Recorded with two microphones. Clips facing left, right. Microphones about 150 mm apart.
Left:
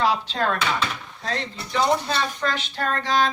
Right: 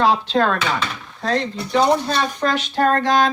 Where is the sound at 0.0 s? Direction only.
75° right (ahead or behind).